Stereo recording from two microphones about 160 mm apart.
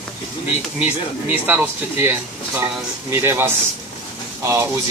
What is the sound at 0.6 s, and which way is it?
Speech, 10° right (ahead or behind).